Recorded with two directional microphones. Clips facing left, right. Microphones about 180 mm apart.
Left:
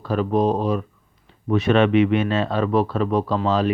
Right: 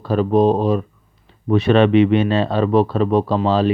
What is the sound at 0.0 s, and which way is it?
A man's voice, 30° right (ahead or behind).